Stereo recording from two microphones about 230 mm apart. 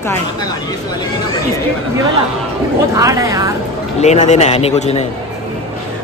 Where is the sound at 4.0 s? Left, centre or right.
Left.